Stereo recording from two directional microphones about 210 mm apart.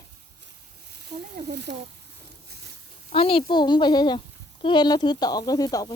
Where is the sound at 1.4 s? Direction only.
50° right (ahead or behind).